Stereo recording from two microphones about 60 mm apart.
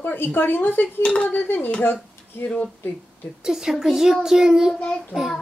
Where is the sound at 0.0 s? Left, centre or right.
Left.